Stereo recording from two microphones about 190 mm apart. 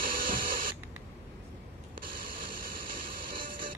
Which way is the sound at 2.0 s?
45° right (ahead or behind).